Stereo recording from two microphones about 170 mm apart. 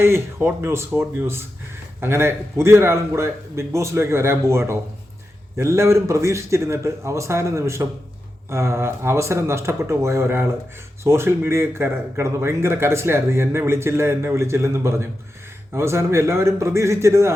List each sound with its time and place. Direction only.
0.0 s speech: 15° right (ahead or behind)